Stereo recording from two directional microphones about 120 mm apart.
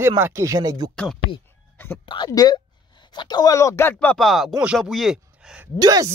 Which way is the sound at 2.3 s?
30° left (ahead or behind).